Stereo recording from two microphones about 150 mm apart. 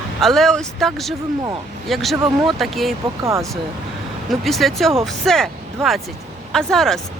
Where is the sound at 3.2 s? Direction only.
20° right (ahead or behind).